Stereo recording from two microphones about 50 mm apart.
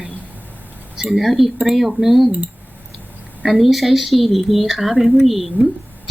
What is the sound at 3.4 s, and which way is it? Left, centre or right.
A woman's voice, centre.